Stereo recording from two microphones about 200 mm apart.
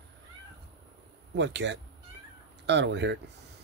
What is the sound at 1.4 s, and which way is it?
Speech, 60° right (ahead or behind).